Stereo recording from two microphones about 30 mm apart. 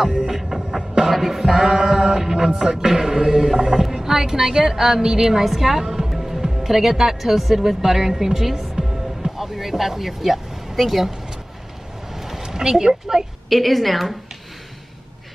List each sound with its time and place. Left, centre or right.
0.3 s music: centre
1.1 s music: centre
1.4 s a capella: centre
1.9 s chant: centre
3.9 s a woman's voice: centre
5.4 s a woman's voice: centre
12.1 s a sound: centre
12.4 s a woman's voice: centre
13.5 s a woman's voice: centre